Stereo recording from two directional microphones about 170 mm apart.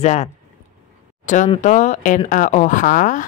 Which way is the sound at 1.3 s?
45° left (ahead or behind).